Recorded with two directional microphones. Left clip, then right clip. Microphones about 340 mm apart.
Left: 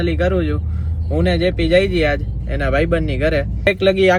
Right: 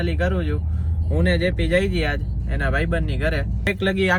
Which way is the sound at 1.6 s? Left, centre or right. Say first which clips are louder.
Left 8 dB; left.